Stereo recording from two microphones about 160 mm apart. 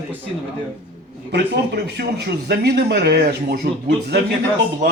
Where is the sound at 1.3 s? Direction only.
90° right.